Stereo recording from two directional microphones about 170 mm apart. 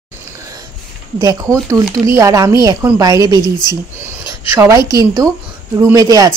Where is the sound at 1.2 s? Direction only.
20° right (ahead or behind).